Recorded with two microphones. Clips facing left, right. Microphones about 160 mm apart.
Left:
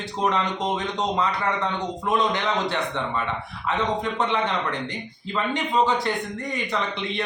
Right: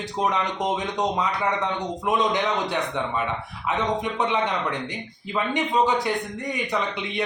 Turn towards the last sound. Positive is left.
turn(degrees=-20)  # may be behind; listen again after turning